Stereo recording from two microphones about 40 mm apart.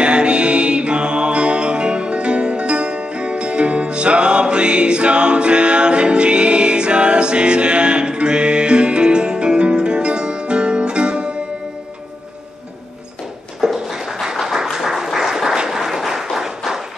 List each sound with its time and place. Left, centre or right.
0.0 s music: right
13.6 s a sound: centre
15.1 s applause: centre